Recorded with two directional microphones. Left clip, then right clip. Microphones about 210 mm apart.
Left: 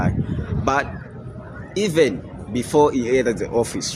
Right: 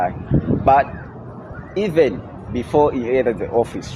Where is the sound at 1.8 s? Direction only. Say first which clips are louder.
Right 2 dB; 40° left (ahead or behind).